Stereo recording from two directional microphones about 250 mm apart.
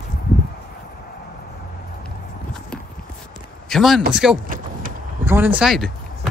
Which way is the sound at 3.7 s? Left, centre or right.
Centre.